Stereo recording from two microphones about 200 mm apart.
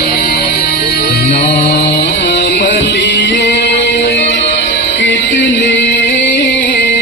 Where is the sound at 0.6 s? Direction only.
50° left (ahead or behind).